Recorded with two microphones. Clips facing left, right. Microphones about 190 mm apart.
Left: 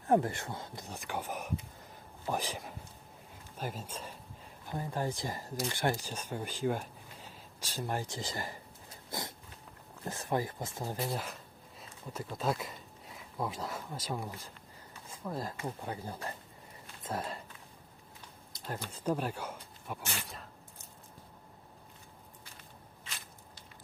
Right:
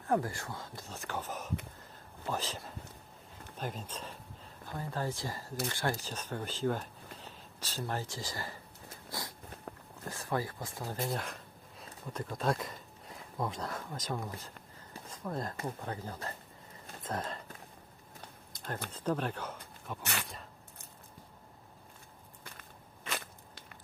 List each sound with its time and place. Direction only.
0.1 s speech: 20° left (ahead or behind)
9.0 s a sound: 20° left (ahead or behind)
10.1 s speech: 20° left (ahead or behind)
11.0 s speech: 5° left (ahead or behind)
17.0 s a sound: 10° left (ahead or behind)
18.9 s speech: 10° left (ahead or behind)
23.0 s walk: 55° right (ahead or behind)